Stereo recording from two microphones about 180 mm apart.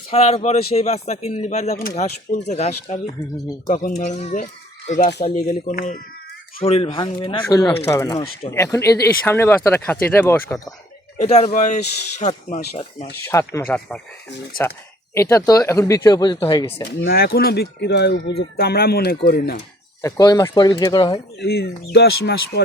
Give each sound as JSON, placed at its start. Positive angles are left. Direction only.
{"t": 0.1, "sound": "speech", "side_deg": 35}
{"t": 6.6, "sound": "speech", "side_deg": 35}
{"t": 11.2, "sound": "speech", "side_deg": 40}
{"t": 13.5, "sound": "speech", "side_deg": 10}
{"t": 15.1, "sound": "speech", "side_deg": 15}
{"t": 17.0, "sound": "speech", "side_deg": 60}
{"t": 20.0, "sound": "speech", "side_deg": 20}
{"t": 21.4, "sound": "speech", "side_deg": 60}